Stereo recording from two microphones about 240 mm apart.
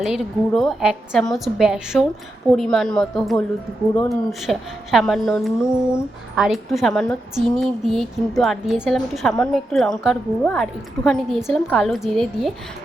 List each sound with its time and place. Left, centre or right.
0.0 s a woman's voice: centre